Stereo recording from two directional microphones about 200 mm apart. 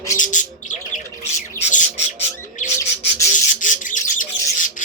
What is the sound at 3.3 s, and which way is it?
Squawk, 40° left (ahead or behind).